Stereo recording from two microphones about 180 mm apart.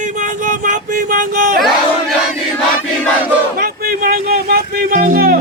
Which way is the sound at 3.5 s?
55° right (ahead or behind).